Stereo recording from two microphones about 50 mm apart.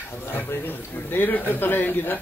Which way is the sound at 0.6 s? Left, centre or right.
Left.